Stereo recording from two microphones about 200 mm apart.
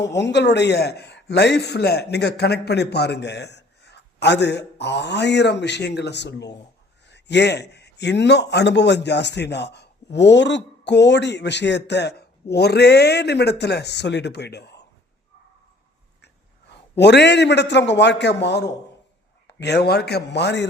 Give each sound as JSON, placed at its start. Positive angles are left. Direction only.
{"t": 0.0, "sound": "a man's voice", "side_deg": 60}
{"t": 17.0, "sound": "a man's voice", "side_deg": 60}